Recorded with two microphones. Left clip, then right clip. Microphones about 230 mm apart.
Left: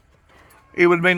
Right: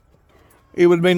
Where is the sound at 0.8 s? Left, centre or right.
Right.